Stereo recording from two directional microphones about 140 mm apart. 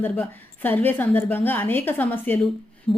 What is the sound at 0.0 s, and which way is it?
A woman's voice, 15° left (ahead or behind).